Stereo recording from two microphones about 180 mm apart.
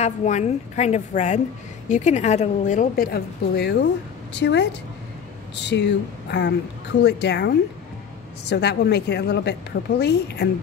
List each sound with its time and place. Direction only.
0.0 s a woman's voice: 40° left (ahead or behind); by 10.5 s 65° left (ahead or behind)